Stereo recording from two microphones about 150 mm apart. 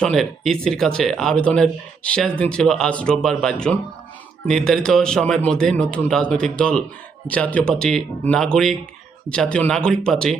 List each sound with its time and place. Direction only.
0.0 s speech: 5° left (ahead or behind)